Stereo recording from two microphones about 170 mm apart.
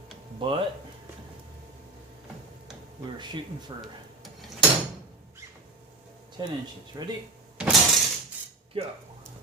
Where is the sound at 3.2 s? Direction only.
25° right (ahead or behind).